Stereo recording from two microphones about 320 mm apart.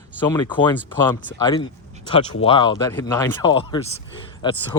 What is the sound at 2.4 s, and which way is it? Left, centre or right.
Speech, centre.